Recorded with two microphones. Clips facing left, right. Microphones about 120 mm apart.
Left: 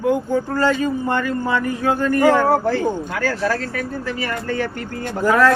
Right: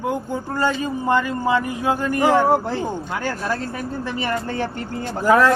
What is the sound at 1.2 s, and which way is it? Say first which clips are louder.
A man's voice: even; 20° right (ahead or behind).